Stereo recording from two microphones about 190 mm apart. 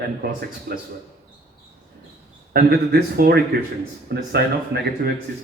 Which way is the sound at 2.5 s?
55° right (ahead or behind).